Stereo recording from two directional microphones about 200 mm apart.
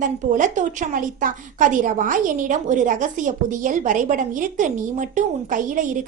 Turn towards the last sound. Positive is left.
turn(degrees=-40)  # may be behind; listen again after turning